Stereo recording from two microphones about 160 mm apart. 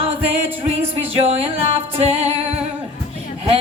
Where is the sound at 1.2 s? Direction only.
40° right (ahead or behind).